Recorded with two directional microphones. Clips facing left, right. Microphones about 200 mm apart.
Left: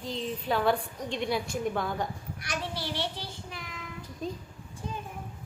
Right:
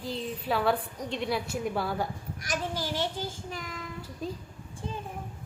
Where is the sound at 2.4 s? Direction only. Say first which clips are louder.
Right 3 dB; 45° right (ahead or behind).